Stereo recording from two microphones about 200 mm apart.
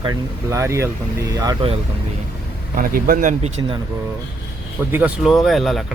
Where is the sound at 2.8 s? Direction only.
45° right (ahead or behind).